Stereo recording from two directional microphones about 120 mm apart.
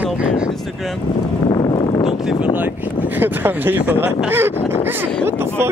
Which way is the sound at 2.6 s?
15° right (ahead or behind).